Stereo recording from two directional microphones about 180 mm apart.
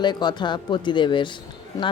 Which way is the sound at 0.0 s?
25° left (ahead or behind).